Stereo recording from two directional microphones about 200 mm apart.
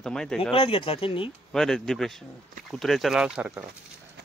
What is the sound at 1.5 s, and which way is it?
Speech, centre (ahead or behind).